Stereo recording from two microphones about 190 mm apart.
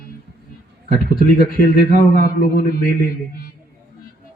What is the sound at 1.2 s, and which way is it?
A man's voice, 50° left (ahead or behind).